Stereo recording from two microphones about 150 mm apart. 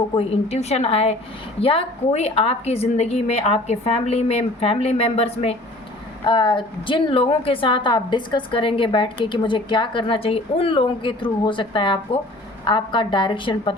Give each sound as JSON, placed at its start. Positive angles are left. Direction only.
{"t": 0.1, "sound": "a woman's voice", "side_deg": 40}
{"t": 6.2, "sound": "a woman's voice", "side_deg": 30}